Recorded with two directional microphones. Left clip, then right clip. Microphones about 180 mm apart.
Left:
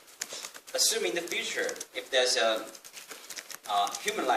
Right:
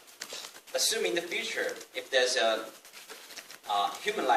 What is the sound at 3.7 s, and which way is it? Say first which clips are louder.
Speech: left 1 dB; 15° left (ahead or behind).